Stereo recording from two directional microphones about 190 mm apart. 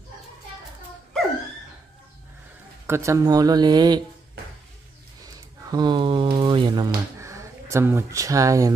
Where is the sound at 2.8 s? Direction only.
15° right (ahead or behind).